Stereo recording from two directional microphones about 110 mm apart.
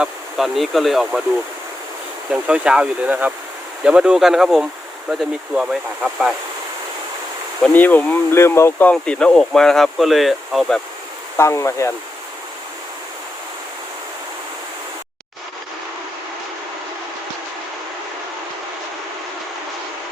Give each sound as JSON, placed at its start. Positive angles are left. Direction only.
{"t": 0.0, "sound": "speech", "side_deg": 0}
{"t": 2.3, "sound": "speech", "side_deg": -10}
{"t": 7.7, "sound": "speech", "side_deg": 15}
{"t": 8.9, "sound": "speech", "side_deg": 10}
{"t": 11.3, "sound": "speech", "side_deg": 25}